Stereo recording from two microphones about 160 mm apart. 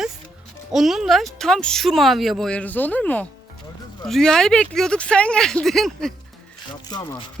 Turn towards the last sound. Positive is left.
turn(degrees=25)  # may be behind; listen again after turning